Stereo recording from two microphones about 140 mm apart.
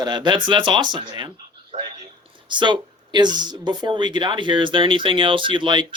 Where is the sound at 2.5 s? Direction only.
35° right (ahead or behind).